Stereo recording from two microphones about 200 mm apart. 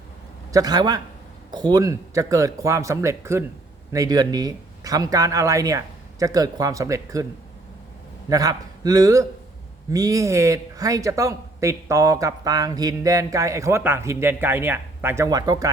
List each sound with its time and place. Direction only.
0.5 s a man's voice: 20° right (ahead or behind)
8.3 s speech: 15° right (ahead or behind)